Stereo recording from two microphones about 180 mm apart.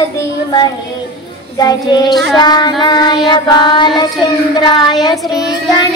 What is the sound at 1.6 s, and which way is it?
Child singing, 20° left (ahead or behind).